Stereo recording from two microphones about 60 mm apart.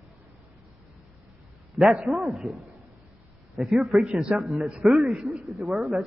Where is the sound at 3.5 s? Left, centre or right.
Centre.